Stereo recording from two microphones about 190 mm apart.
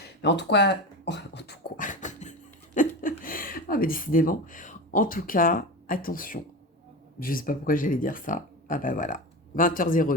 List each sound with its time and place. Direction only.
0.2 s speech: 65° left (ahead or behind)
1.7 s beatboxing: 45° left (ahead or behind)
2.7 s a sound: 45° left (ahead or behind)
7.2 s speech: 45° left (ahead or behind)